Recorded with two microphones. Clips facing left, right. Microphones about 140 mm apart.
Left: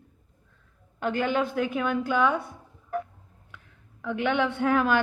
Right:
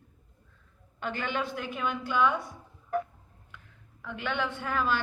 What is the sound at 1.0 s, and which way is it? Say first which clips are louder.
A woman's voice: left 7 dB; 45° left (ahead or behind).